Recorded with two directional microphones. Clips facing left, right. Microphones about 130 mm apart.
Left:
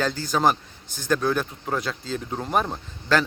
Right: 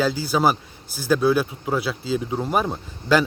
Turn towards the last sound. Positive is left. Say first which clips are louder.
# right 3 dB
turn(degrees=-10)  # may be behind; listen again after turning